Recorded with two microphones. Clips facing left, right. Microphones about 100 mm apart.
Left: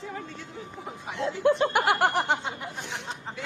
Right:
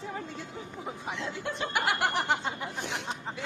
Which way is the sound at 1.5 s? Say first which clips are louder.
Left 6 dB; 50° left (ahead or behind).